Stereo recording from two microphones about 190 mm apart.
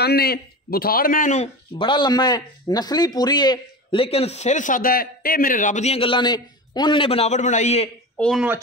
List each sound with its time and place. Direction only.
0.0 s a man's voice: 55° left (ahead or behind); by 7.9 s 35° left (ahead or behind)
8.2 s speech: centre (ahead or behind)